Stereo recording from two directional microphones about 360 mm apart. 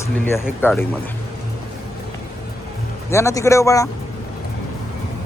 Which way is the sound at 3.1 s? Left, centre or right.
Centre.